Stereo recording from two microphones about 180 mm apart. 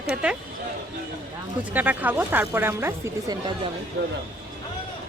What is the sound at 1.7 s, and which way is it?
Speech, 10° right (ahead or behind).